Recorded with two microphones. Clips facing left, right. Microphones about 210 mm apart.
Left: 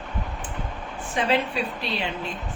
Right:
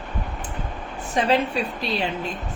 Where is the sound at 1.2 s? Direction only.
40° right (ahead or behind).